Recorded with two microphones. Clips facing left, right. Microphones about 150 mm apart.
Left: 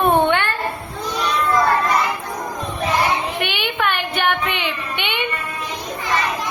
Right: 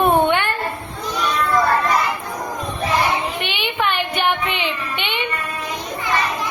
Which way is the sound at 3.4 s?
Centre (ahead or behind).